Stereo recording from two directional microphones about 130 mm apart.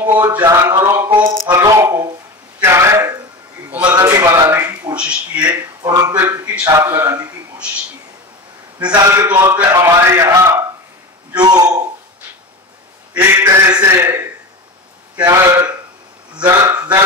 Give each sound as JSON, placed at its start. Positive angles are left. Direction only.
{"t": 0.4, "sound": "a man's voice", "side_deg": -20}
{"t": 2.6, "sound": "throat clearing", "side_deg": -20}
{"t": 3.9, "sound": "a sound", "side_deg": -25}
{"t": 4.9, "sound": "speech", "side_deg": -10}
{"t": 5.8, "sound": "a man's voice", "side_deg": -30}
{"t": 9.1, "sound": "a man's voice", "side_deg": -25}
{"t": 13.1, "sound": "a man's voice", "side_deg": -20}